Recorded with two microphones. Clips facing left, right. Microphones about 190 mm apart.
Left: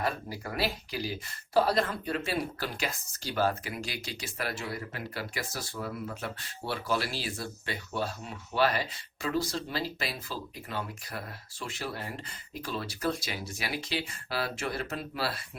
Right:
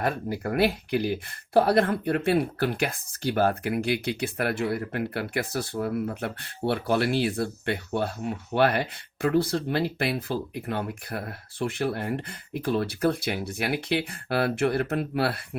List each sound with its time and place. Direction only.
0.0 s speech: 55° right (ahead or behind)